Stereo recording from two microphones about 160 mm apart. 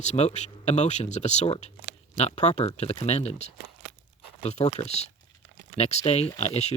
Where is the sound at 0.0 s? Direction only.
45° left (ahead or behind).